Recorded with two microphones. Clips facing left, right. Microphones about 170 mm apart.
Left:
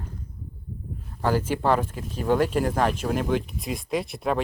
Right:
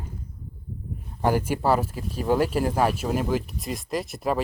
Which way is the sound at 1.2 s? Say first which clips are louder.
Right 1 dB; 15° right (ahead or behind).